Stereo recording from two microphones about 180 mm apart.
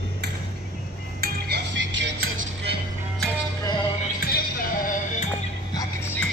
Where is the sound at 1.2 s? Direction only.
75° right (ahead or behind).